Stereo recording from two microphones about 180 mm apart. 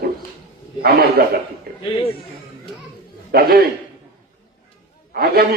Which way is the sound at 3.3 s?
60° right (ahead or behind).